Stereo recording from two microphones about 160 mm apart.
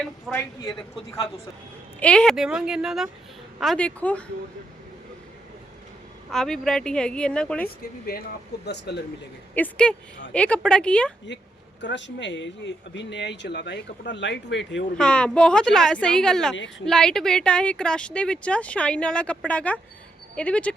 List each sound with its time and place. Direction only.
0.3 s speech: 20° left (ahead or behind)
2.0 s speech: 5° left (ahead or behind)
6.3 s speech: 5° left (ahead or behind)
8.6 s speech: 90° left
9.6 s speech: 5° left (ahead or behind)
11.8 s speech: 90° left
14.9 s speech: 5° left (ahead or behind)